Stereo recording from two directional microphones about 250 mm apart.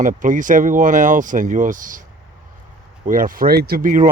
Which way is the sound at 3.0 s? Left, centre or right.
Right.